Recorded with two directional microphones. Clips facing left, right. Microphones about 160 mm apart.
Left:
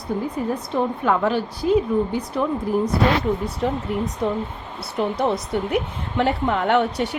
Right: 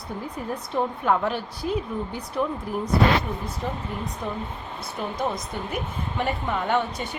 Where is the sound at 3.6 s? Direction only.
75° left (ahead or behind).